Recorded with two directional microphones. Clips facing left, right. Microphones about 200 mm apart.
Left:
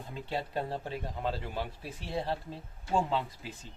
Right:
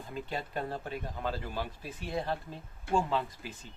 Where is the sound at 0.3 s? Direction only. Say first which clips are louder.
Left 3 dB; 30° left (ahead or behind).